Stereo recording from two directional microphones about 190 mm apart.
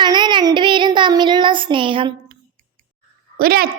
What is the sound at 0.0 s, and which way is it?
Child singing, 25° right (ahead or behind).